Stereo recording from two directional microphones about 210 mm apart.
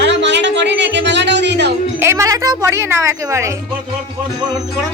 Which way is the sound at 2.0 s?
15° right (ahead or behind).